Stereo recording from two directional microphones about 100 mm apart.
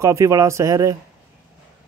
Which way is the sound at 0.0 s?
30° right (ahead or behind).